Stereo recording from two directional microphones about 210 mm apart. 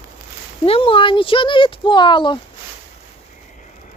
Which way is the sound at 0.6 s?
25° left (ahead or behind).